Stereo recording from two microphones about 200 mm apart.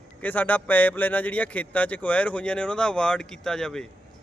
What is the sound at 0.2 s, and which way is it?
Speech, 10° left (ahead or behind).